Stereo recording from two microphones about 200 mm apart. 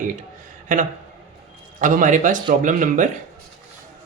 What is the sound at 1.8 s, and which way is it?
Speech, 40° right (ahead or behind).